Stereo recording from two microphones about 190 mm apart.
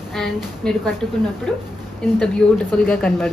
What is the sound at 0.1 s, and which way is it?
Speech, 5° left (ahead or behind).